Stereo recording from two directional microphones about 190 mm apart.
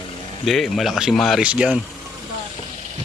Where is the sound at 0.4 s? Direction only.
Centre (ahead or behind).